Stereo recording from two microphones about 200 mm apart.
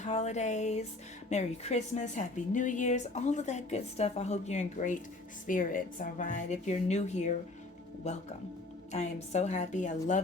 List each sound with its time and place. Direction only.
0.0 s a woman's voice: 35° left (ahead or behind)